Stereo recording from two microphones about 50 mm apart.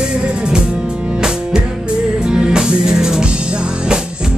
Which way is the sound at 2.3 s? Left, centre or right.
Centre.